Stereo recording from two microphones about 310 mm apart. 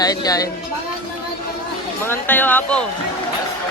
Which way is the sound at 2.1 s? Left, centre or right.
Centre.